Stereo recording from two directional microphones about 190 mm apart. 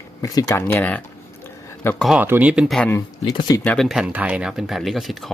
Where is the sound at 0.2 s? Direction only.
20° left (ahead or behind).